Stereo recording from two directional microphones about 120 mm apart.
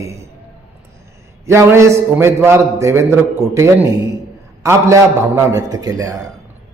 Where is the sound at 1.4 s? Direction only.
25° right (ahead or behind).